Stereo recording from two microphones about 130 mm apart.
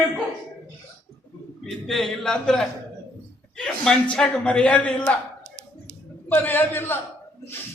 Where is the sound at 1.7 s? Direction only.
Centre (ahead or behind).